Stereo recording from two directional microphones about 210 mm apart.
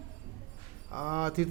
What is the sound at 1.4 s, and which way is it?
Speech, 25° right (ahead or behind).